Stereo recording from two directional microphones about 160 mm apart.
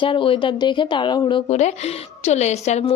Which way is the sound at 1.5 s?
45° left (ahead or behind).